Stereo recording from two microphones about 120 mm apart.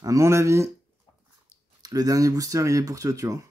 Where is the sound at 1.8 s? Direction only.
30° right (ahead or behind).